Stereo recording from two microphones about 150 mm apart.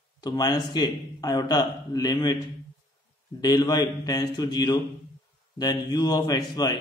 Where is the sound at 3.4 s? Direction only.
25° left (ahead or behind).